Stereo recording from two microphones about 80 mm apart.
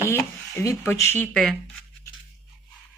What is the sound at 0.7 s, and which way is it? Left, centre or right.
Speech, left.